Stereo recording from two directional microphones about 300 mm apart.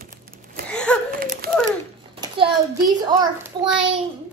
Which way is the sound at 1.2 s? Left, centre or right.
Right.